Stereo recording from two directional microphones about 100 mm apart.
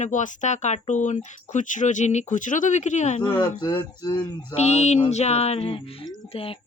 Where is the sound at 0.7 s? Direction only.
90° left.